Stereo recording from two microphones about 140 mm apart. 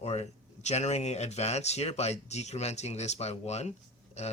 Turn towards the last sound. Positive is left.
turn(degrees=55)  # may be behind; listen again after turning